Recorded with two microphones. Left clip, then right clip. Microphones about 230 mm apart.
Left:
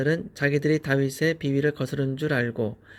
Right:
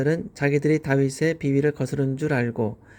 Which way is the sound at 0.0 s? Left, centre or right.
Centre.